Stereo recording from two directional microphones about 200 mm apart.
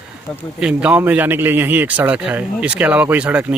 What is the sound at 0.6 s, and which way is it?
A man's voice, 5° right (ahead or behind).